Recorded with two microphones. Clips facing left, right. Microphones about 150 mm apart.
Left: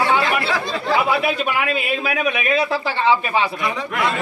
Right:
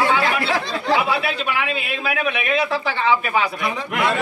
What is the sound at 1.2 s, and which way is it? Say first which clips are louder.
Speech: left 3 dB; 45° left (ahead or behind).